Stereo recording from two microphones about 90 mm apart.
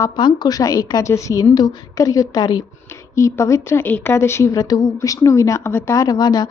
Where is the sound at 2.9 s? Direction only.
35° left (ahead or behind).